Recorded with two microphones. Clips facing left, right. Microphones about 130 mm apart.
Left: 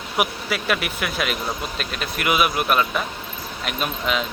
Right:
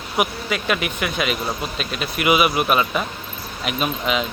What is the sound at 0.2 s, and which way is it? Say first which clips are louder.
Speech: right 1 dB; centre (ahead or behind).